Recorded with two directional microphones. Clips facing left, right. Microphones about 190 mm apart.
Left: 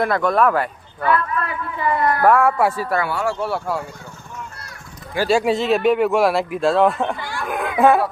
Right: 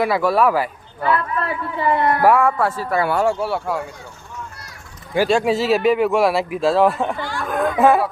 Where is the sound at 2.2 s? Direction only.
Centre (ahead or behind).